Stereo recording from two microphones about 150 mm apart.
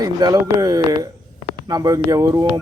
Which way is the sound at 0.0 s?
25° right (ahead or behind).